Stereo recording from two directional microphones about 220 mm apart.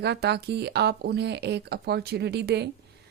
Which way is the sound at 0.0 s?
50° right (ahead or behind).